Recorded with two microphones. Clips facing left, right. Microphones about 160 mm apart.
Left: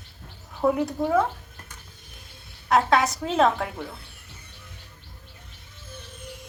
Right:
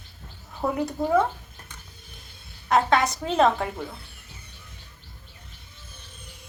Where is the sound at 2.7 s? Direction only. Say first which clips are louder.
Even; centre (ahead or behind).